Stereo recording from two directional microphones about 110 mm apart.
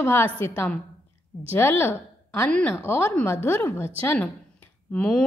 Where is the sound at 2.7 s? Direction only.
20° left (ahead or behind).